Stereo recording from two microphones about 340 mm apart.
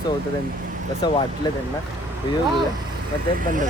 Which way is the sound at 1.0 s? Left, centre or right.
Centre.